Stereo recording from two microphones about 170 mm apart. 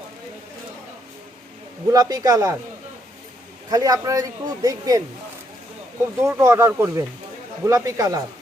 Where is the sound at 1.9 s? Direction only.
20° right (ahead or behind).